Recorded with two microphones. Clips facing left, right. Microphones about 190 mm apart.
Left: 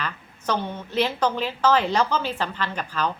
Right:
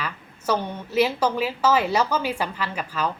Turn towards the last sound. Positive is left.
turn(degrees=-10)  # may be behind; listen again after turning